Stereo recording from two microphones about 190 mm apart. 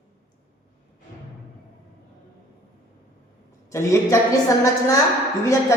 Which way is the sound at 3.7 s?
15° left (ahead or behind).